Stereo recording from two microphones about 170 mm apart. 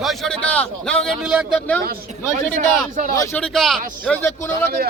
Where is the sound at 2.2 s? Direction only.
10° left (ahead or behind).